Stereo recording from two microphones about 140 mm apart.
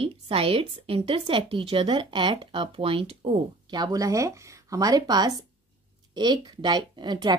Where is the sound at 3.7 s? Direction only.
25° right (ahead or behind).